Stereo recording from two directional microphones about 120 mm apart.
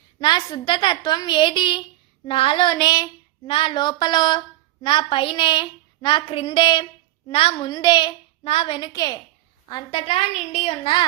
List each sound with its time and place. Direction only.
0.2 s speech: 40° left (ahead or behind)
8.4 s a woman's voice: 50° left (ahead or behind)
8.9 s speech: 30° left (ahead or behind)
10.0 s a woman's voice: 55° left (ahead or behind)